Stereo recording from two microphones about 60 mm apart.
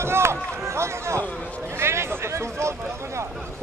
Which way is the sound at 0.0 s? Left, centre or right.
Right.